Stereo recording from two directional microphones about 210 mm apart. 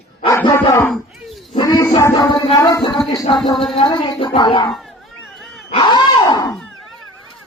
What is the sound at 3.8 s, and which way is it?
Speech, 20° left (ahead or behind).